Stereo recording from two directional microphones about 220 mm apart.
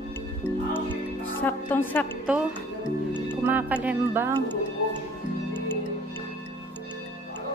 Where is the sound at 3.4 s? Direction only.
10° right (ahead or behind).